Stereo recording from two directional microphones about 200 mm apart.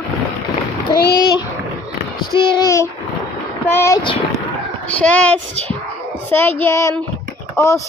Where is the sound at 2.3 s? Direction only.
25° left (ahead or behind).